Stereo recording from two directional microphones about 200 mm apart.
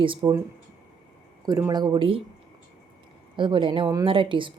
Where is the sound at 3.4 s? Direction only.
25° right (ahead or behind).